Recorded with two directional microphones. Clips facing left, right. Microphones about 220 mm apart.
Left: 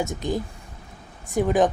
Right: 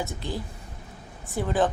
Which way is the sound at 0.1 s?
15° left (ahead or behind).